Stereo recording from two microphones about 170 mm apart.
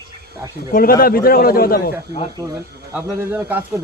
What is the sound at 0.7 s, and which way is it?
A man's voice, 60° left (ahead or behind).